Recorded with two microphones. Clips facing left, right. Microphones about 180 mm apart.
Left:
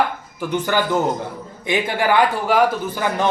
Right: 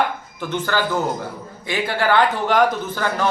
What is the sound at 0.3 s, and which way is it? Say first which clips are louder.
Speech: left 3 dB; 15° left (ahead or behind).